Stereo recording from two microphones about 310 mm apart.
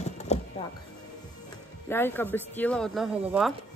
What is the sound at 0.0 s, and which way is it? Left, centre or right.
Music, left.